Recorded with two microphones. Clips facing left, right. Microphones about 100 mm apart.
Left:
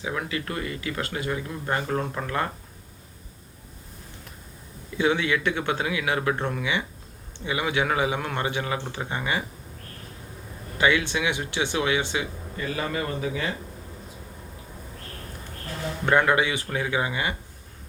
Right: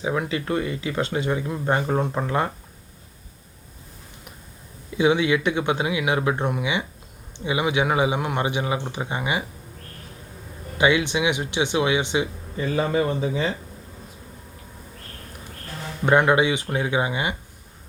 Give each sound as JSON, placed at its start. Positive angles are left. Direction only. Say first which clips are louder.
{"t": 0.0, "sound": "speech", "louder": "right 5 dB", "side_deg": -25}
{"t": 4.9, "sound": "a man's voice", "louder": "right 4 dB", "side_deg": -15}
{"t": 10.8, "sound": "speech", "louder": "right 3 dB", "side_deg": -20}
{"t": 16.0, "sound": "speech", "louder": "right 3 dB", "side_deg": -20}